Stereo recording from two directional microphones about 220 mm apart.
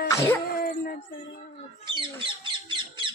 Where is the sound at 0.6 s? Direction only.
45° left (ahead or behind).